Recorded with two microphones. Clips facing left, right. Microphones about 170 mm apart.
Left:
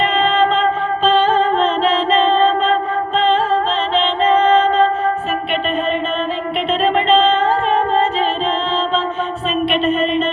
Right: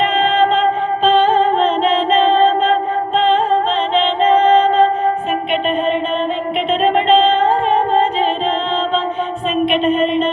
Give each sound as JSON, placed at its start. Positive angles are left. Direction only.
{"t": 1.0, "sound": "music", "side_deg": -55}
{"t": 3.2, "sound": "music", "side_deg": -55}
{"t": 6.7, "sound": "music", "side_deg": -50}
{"t": 9.7, "sound": "music", "side_deg": -55}